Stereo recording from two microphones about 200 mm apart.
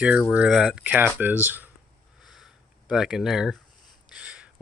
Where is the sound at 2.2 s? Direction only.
Centre (ahead or behind).